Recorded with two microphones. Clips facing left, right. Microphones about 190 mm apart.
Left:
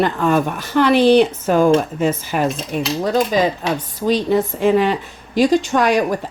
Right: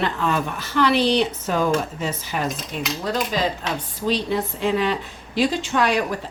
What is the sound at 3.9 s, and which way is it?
A woman's voice, 45° left (ahead or behind).